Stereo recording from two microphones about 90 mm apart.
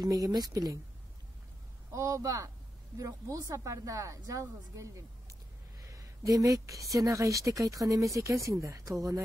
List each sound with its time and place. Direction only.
0.0 s speech: 45° right (ahead or behind)
1.9 s speech: 35° right (ahead or behind)
5.8 s a sound: 40° right (ahead or behind)
7.0 s speech: 35° right (ahead or behind)